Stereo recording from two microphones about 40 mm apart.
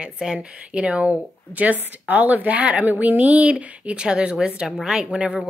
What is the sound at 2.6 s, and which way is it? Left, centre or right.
Speech, right.